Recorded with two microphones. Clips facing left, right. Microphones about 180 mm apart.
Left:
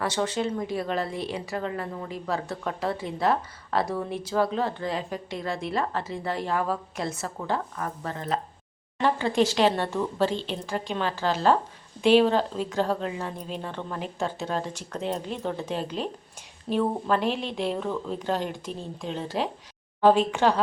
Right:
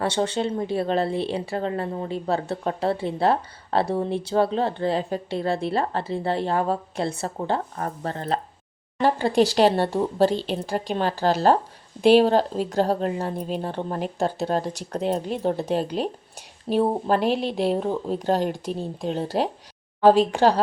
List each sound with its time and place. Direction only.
0.0 s speech: 30° right (ahead or behind)